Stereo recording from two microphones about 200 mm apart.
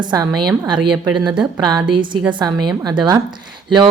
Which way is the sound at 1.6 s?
20° right (ahead or behind).